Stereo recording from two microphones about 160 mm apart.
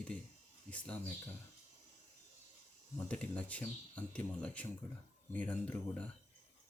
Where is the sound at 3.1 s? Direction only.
5° left (ahead or behind).